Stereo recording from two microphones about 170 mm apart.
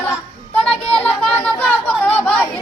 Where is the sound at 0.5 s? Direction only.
5° left (ahead or behind).